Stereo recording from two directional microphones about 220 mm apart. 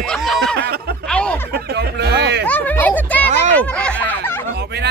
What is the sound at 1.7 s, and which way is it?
Speech, 50° right (ahead or behind).